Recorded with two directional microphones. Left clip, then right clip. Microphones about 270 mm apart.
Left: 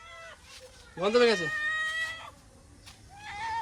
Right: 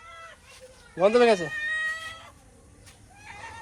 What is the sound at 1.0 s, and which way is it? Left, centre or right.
Speech, centre.